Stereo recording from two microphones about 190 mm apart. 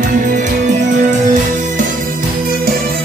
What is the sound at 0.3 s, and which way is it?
Music, 40° right (ahead or behind).